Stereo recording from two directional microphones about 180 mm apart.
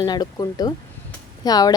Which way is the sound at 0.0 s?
25° left (ahead or behind).